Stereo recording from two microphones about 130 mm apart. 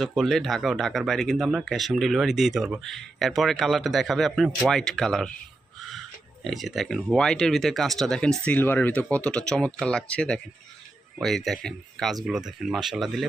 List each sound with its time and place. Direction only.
0.2 s speech: centre (ahead or behind)
6.4 s speech: centre (ahead or behind)